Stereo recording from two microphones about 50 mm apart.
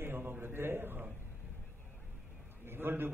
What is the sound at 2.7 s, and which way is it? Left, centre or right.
Speech, right.